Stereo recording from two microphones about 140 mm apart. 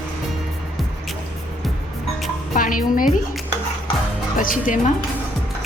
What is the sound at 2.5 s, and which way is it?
Speech, 80° left.